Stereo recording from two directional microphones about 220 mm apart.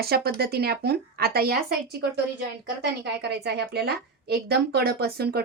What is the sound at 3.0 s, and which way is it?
A woman's voice, 50° right (ahead or behind).